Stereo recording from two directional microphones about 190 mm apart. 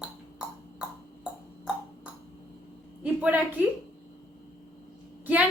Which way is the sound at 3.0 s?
10° right (ahead or behind).